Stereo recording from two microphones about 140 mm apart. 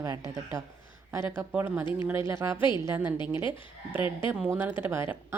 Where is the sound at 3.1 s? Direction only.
35° left (ahead or behind).